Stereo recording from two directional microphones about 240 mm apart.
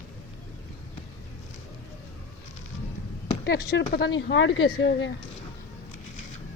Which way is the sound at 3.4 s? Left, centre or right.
Left.